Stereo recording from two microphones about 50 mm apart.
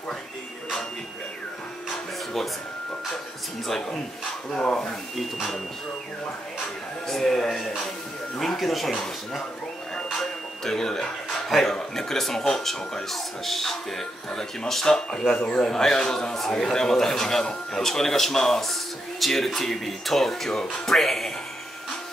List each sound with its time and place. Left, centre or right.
3.6 s a man's voice: centre
4.6 s speech: centre
5.1 s speech: centre
7.1 s speech: centre
10.1 s a man's voice: centre
15.6 s a man's voice: centre